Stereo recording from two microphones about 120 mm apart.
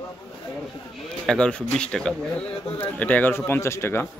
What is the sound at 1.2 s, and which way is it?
A man's voice, 5° left (ahead or behind).